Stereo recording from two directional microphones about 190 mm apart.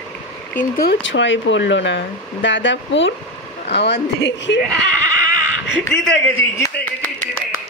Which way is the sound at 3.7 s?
60° left (ahead or behind).